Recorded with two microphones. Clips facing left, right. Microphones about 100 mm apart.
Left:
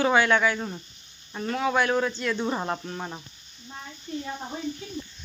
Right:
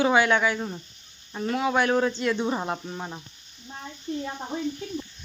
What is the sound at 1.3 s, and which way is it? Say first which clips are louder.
Speech: right 1 dB; 15° right (ahead or behind).